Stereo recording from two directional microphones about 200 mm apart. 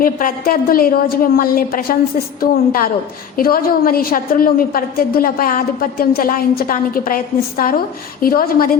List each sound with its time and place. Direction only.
0.0 s a woman's voice: 45° left (ahead or behind)